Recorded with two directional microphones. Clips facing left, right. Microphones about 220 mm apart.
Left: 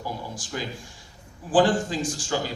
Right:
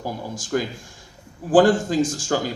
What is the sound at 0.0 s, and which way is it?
Speech, 45° right (ahead or behind).